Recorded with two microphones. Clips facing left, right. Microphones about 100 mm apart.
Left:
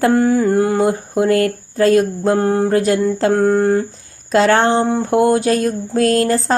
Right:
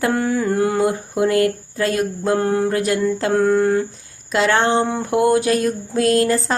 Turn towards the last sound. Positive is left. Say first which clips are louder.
# left 2 dB
turn(degrees=35)  # may be behind; listen again after turning